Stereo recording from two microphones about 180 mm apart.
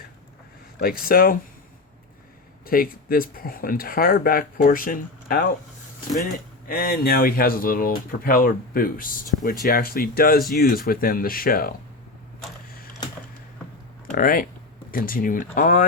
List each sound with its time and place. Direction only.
0.8 s speech: 55° left (ahead or behind)
2.6 s speech: 55° left (ahead or behind)
6.7 s speech: 55° left (ahead or behind)
14.1 s speech: 50° left (ahead or behind)